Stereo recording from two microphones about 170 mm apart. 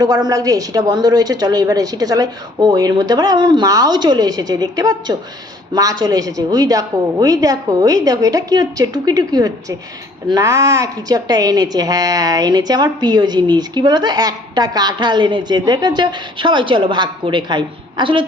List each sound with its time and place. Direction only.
0.0 s a woman's voice: 25° right (ahead or behind)